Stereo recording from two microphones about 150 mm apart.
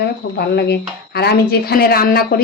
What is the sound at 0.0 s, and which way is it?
Speech, 90° left.